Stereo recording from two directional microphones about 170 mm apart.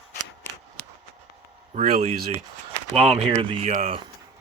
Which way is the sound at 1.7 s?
40° right (ahead or behind).